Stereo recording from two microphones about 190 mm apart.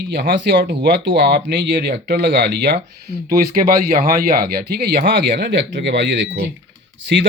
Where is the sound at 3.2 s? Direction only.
50° right (ahead or behind).